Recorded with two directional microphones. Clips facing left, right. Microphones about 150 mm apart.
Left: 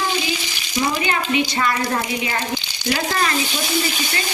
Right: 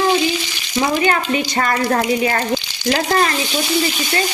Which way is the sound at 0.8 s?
45° right (ahead or behind).